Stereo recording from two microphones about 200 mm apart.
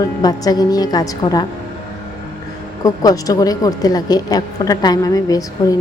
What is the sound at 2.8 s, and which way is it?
A woman's voice, 15° left (ahead or behind).